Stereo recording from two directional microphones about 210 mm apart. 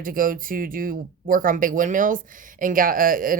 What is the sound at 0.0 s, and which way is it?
Speech, 40° right (ahead or behind).